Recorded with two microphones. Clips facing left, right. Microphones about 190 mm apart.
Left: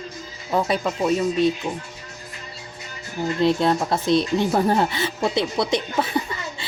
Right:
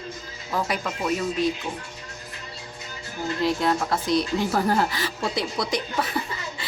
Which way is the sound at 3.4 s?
25° left (ahead or behind).